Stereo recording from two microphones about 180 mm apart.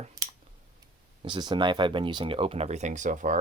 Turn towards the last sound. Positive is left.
turn(degrees=-45)  # may be behind; listen again after turning